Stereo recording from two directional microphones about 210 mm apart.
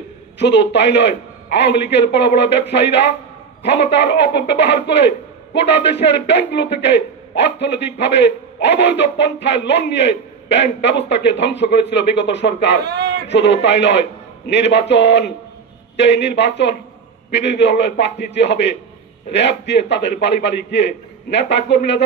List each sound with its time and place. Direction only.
0.4 s a man's voice: 55° left (ahead or behind)
12.8 s a sound: 50° right (ahead or behind)
13.3 s a man's voice: 55° left (ahead or behind)